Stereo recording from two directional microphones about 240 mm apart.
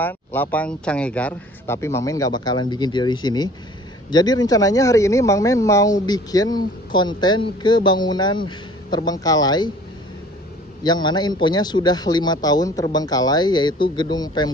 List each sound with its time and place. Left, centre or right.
0.0 s a man's voice: centre
10.8 s a man's voice: centre